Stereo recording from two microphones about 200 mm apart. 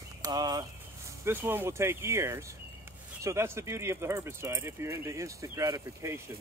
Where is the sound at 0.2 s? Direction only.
20° right (ahead or behind).